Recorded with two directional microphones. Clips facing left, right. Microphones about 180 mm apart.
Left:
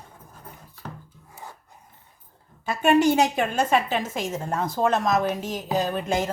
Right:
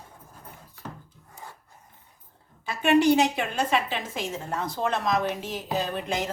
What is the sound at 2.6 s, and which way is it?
A woman's voice, 45° left (ahead or behind).